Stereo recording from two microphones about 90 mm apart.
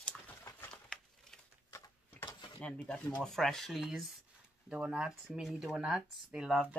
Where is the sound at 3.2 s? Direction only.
5° left (ahead or behind).